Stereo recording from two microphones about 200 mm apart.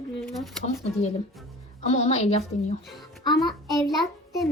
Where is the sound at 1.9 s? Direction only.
35° left (ahead or behind).